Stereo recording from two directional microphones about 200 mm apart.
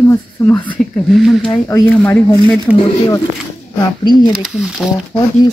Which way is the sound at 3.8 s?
20° left (ahead or behind).